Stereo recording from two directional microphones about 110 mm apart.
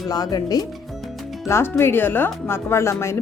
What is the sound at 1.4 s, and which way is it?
Speech, 20° left (ahead or behind).